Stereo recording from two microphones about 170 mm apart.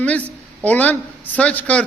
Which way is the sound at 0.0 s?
10° left (ahead or behind).